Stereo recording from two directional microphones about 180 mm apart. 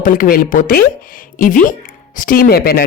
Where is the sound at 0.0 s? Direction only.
50° left (ahead or behind).